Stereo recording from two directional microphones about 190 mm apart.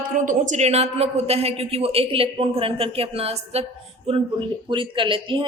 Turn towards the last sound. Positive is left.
turn(degrees=-25)  # may be behind; listen again after turning